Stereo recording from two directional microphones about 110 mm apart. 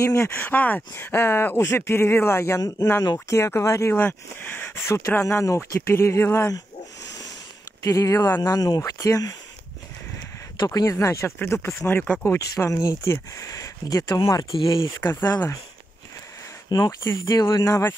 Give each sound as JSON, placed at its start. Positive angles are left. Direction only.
{"t": 0.0, "sound": "speech", "side_deg": 25}
{"t": 0.3, "sound": "speech", "side_deg": 15}
{"t": 7.8, "sound": "speech", "side_deg": 30}
{"t": 10.7, "sound": "speech", "side_deg": 30}
{"t": 12.4, "sound": "speech", "side_deg": 30}
{"t": 14.5, "sound": "speech", "side_deg": 50}
{"t": 15.0, "sound": "speech", "side_deg": 20}
{"t": 16.6, "sound": "speech", "side_deg": 40}